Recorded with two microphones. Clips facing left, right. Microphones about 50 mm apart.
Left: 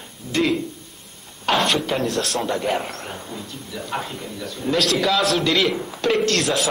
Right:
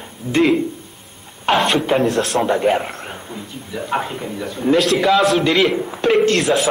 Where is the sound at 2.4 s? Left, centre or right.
Right.